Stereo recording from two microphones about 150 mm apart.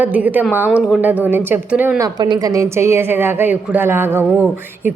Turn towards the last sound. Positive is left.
turn(degrees=-10)  # may be behind; listen again after turning